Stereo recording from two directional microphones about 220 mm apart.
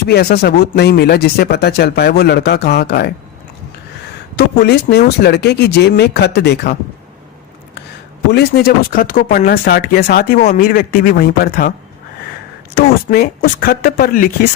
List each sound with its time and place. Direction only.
0.0 s speech: 45° left (ahead or behind)
4.4 s speech: 50° left (ahead or behind)
8.3 s a man's voice: 45° left (ahead or behind)
12.7 s speech: 45° left (ahead or behind)